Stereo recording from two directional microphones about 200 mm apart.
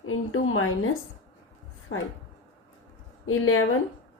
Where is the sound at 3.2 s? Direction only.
90° left.